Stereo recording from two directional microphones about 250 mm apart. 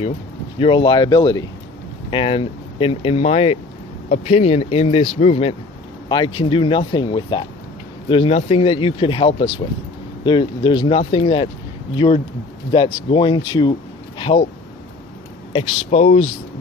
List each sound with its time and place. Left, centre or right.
0.6 s speech: left
15.5 s speech: left